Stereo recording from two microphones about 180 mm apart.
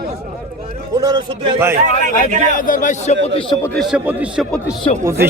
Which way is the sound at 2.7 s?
45° left (ahead or behind).